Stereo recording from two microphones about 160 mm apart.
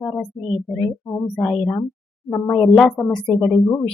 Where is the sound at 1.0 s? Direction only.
15° left (ahead or behind).